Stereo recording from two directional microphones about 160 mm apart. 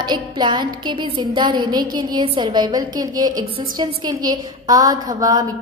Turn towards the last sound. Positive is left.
turn(degrees=-20)  # may be behind; listen again after turning